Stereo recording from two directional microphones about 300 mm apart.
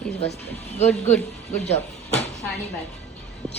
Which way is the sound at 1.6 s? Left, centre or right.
Left.